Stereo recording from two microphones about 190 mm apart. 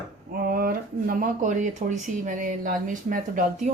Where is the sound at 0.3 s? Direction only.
50° right (ahead or behind).